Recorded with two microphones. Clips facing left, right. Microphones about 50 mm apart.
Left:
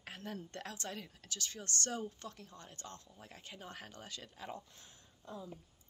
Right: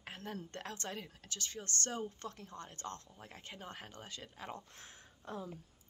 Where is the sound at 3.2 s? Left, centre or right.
Right.